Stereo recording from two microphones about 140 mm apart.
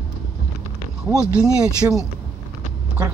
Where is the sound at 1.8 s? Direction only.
20° right (ahead or behind).